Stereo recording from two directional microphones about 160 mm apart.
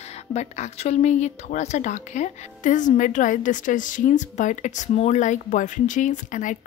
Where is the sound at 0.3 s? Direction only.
45° left (ahead or behind).